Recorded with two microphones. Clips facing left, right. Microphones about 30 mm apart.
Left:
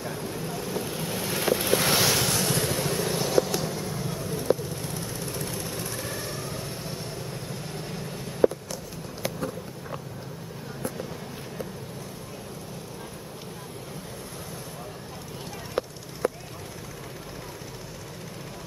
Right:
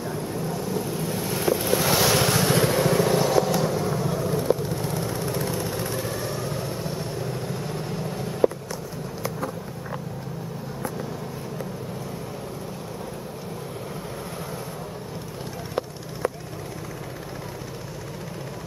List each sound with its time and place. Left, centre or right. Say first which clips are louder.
0.3 s vehicle: right 4 dB; centre
1.0 s boat: right 1 dB; centre
1.9 s vehicle: right 5 dB; centre
2.2 s vehicle: right 5 dB; centre
3.2 s vehicle: right 4 dB; centre
4.2 s vehicle: right 7 dB; right
4.6 s vehicle: right 6 dB; right
5.6 s vehicle: right 5 dB; centre
5.9 s vehicle: right 5 dB; centre